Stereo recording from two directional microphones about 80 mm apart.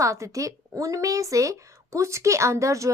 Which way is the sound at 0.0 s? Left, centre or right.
Right.